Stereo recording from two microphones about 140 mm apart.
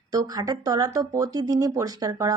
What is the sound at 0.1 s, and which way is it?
Speech, 25° right (ahead or behind).